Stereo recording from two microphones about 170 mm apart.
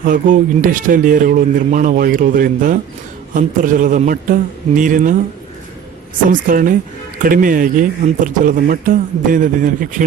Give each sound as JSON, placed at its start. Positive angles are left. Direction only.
{"t": 0.0, "sound": "speech", "side_deg": -50}
{"t": 6.5, "sound": "speech", "side_deg": -55}